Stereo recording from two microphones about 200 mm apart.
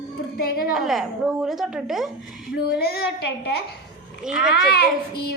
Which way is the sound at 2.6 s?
55° left (ahead or behind).